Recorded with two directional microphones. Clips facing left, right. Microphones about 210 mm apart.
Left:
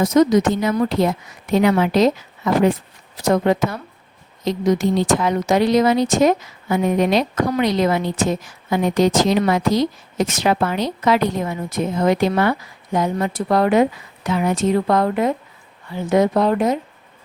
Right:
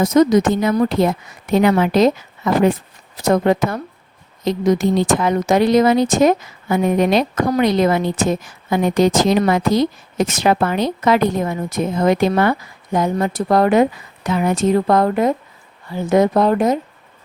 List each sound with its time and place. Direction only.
0.0 s a woman's voice: 50° right (ahead or behind)